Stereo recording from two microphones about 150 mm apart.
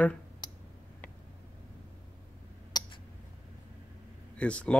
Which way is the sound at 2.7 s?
25° left (ahead or behind).